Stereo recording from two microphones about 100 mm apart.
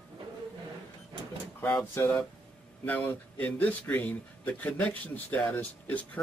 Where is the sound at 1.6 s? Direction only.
15° left (ahead or behind).